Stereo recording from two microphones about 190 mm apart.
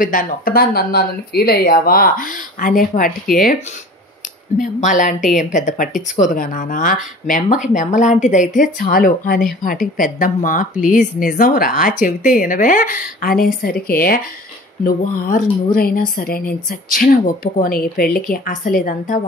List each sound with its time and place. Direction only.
0.0 s speech: 45° left (ahead or behind)
4.6 s speech: 40° left (ahead or behind)